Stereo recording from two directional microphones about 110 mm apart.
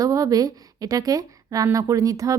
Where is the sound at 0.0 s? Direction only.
35° right (ahead or behind).